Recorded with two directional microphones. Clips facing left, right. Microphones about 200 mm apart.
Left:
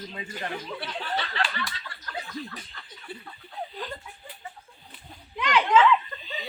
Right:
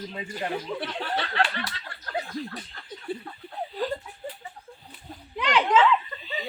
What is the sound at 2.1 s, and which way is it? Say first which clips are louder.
Chuckle: right 4 dB; 40° right (ahead or behind).